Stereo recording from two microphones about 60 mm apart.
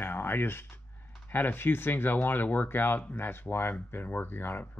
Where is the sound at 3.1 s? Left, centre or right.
Left.